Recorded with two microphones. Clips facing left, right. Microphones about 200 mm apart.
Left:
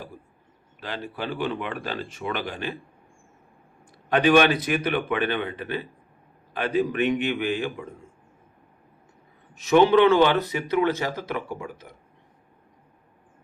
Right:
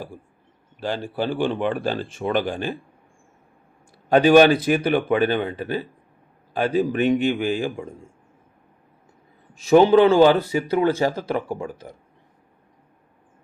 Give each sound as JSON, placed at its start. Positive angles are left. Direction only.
{"t": 0.8, "sound": "speech", "side_deg": -30}
{"t": 2.5, "sound": "speech", "side_deg": -40}
{"t": 4.1, "sound": "speech", "side_deg": -35}
{"t": 9.6, "sound": "speech", "side_deg": -35}